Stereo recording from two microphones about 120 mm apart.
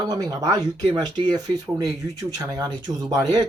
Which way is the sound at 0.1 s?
30° right (ahead or behind).